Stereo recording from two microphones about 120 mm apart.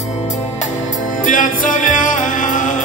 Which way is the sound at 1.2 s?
90° left.